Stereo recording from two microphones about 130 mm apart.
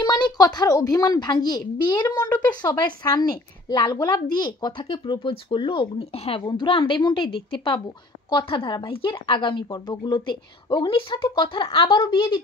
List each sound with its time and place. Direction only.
0.0 s a woman's voice: 35° left (ahead or behind)
6.4 s a woman's voice: 40° left (ahead or behind)